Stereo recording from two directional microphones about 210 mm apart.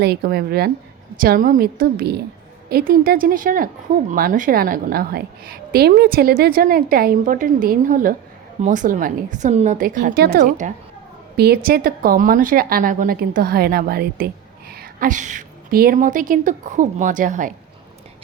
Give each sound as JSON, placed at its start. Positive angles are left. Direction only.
{"t": 0.0, "sound": "a woman's voice", "side_deg": -50}